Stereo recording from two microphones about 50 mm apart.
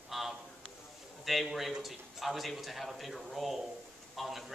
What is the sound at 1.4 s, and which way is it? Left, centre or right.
A man's voice, centre.